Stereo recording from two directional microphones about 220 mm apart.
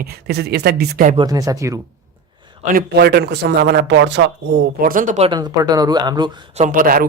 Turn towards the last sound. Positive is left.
turn(degrees=-40)  # may be behind; listen again after turning